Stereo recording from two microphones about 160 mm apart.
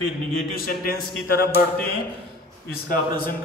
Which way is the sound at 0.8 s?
65° left (ahead or behind).